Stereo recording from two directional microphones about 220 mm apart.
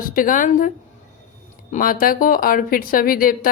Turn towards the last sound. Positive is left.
turn(degrees=40)  # may be behind; listen again after turning